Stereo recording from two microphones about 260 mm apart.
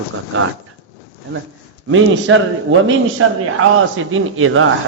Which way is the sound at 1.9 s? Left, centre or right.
Right.